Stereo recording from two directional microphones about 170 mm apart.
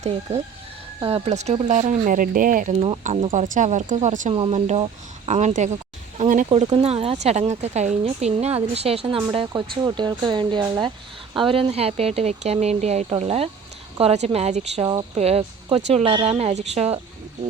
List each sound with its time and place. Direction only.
0.0 s a woman's voice: 40° right (ahead or behind)
6.1 s a sound: 50° right (ahead or behind)
6.8 s a woman's voice: 35° right (ahead or behind)